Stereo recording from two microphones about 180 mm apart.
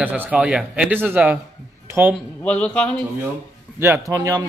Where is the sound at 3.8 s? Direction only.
15° right (ahead or behind).